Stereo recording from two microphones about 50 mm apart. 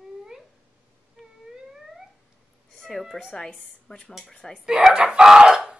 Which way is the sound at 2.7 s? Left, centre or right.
Centre.